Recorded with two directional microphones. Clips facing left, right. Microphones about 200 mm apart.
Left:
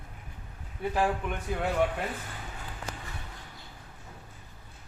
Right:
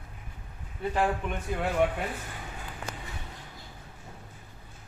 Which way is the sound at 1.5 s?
Centre (ahead or behind).